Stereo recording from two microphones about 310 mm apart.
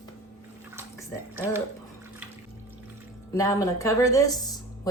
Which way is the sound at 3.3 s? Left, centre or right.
Centre.